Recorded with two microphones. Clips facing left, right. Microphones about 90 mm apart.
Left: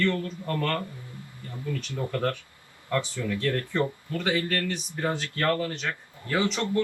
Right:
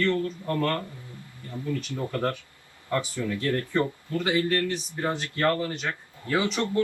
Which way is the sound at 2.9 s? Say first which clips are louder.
Even; 20° right (ahead or behind).